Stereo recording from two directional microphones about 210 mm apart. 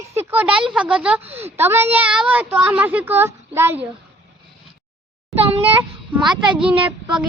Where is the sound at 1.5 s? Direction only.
10° right (ahead or behind).